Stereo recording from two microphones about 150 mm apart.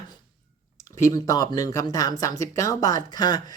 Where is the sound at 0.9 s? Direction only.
20° left (ahead or behind).